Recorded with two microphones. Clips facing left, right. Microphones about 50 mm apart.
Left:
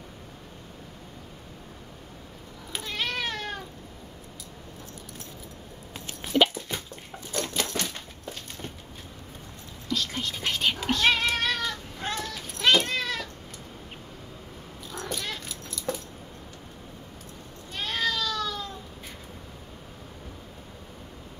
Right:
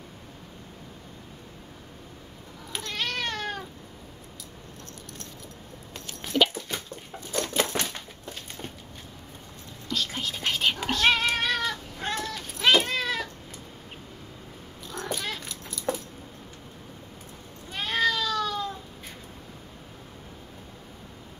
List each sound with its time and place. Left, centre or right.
2.7 s cat: centre
6.2 s dog: centre
7.5 s typewriter: right
9.8 s whispering: centre
10.9 s cat: centre
14.9 s cat: centre
17.7 s a sound: centre